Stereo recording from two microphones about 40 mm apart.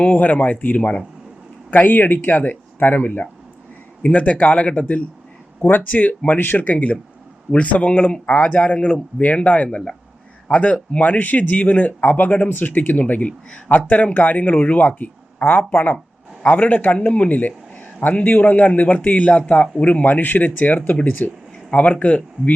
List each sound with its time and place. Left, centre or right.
0.0 s a man's voice: left
1.7 s a man's voice: left
4.2 s speech: left
5.9 s a man's voice: left
6.6 s a man's voice: left
7.9 s speech: left
11.2 s speech: left
12.0 s a man's voice: left
20.1 s a man's voice: left
21.7 s speech: left